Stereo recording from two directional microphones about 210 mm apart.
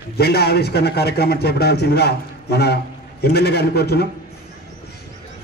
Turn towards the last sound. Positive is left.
turn(degrees=50)  # may be behind; listen again after turning